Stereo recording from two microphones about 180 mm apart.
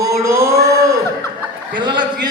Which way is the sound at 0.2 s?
15° right (ahead or behind).